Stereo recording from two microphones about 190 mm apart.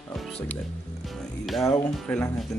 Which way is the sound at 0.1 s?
5° left (ahead or behind).